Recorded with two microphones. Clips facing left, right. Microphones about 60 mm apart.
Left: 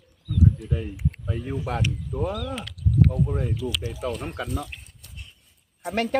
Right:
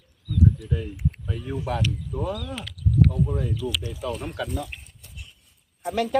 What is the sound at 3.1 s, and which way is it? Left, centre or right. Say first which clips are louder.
Speech: even; left.